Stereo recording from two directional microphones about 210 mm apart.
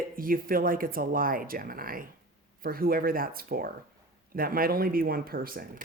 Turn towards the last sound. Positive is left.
turn(degrees=-45)  # may be behind; listen again after turning